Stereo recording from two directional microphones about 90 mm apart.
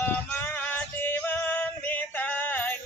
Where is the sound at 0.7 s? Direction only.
20° left (ahead or behind).